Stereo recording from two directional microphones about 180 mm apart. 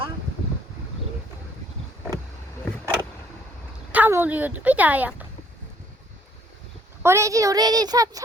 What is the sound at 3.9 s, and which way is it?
A woman's voice, 10° right (ahead or behind).